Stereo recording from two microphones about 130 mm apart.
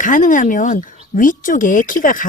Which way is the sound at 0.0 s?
80° left.